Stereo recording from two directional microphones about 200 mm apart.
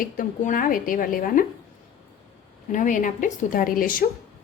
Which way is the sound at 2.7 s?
40° left (ahead or behind).